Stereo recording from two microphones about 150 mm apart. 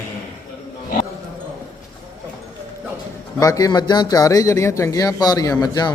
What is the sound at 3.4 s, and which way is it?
Speech, 25° left (ahead or behind).